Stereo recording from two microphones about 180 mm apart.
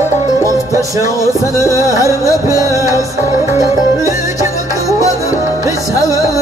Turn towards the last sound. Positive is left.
turn(degrees=-20)  # may be behind; listen again after turning